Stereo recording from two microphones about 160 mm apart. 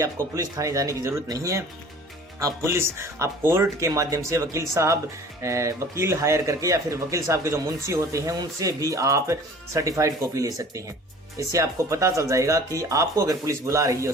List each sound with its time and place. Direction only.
0.0 s speech: 20° right (ahead or behind)